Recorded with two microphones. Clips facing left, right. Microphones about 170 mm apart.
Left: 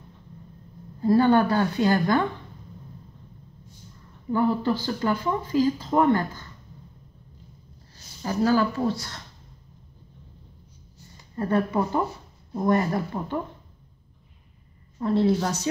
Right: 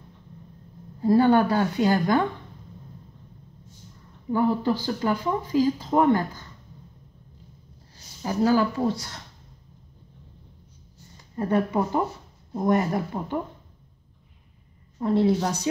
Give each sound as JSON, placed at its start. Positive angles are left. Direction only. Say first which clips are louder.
{"t": 1.0, "sound": "speech", "louder": "even", "side_deg": -10}
{"t": 4.3, "sound": "speech", "louder": "even", "side_deg": -15}
{"t": 8.2, "sound": "speech", "louder": "right 1 dB", "side_deg": -15}
{"t": 11.3, "sound": "speech", "louder": "even", "side_deg": -15}
{"t": 15.0, "sound": "speech", "louder": "even", "side_deg": -15}